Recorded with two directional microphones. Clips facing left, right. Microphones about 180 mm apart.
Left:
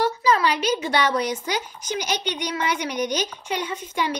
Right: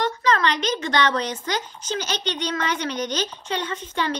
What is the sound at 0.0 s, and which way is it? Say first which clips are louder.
A woman's voice: left 1 dB; 10° left (ahead or behind).